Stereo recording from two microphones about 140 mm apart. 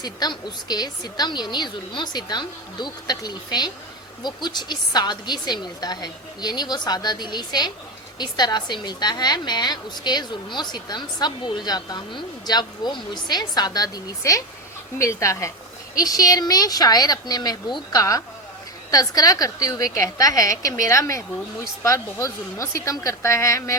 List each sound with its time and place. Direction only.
0.0 s a woman's voice: 30° left (ahead or behind)